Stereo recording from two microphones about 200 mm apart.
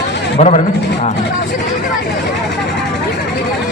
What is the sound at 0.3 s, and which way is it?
Speech, 35° left (ahead or behind).